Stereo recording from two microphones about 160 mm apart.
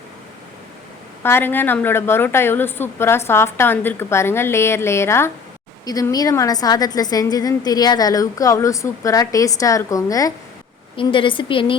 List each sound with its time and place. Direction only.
1.2 s a woman's voice: 15° left (ahead or behind)
10.9 s a woman's voice: 30° left (ahead or behind)